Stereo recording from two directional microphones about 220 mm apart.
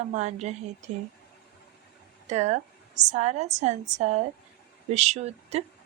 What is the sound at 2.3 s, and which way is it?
A woman's voice, 30° right (ahead or behind).